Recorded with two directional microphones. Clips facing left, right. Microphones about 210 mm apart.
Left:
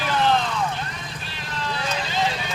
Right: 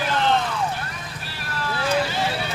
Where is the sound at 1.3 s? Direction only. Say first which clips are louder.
Right 1 dB; 20° left (ahead or behind).